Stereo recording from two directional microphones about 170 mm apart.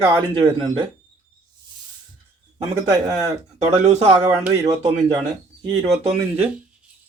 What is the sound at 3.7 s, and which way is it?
Speech, 35° right (ahead or behind).